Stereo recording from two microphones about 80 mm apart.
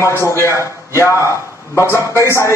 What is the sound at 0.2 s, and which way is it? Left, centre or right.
A man's voice, left.